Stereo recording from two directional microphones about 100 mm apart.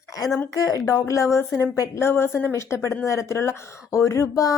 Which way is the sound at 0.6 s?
35° left (ahead or behind).